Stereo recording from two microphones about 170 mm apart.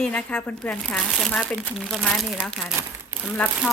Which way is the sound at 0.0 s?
5° left (ahead or behind).